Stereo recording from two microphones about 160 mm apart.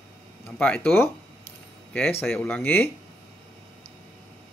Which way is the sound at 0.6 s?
10° left (ahead or behind).